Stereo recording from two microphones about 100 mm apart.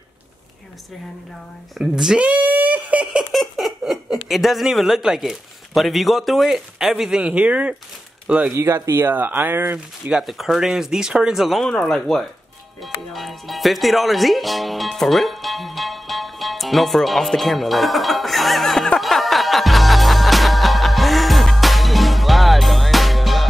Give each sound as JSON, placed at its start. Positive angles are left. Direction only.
{"t": 1.8, "sound": "speech", "side_deg": -5}
{"t": 8.5, "sound": "speech", "side_deg": -30}
{"t": 10.1, "sound": "speech", "side_deg": 0}
{"t": 12.8, "sound": "music", "side_deg": 0}